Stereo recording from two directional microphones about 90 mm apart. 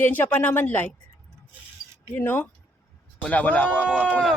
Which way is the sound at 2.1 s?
25° left (ahead or behind).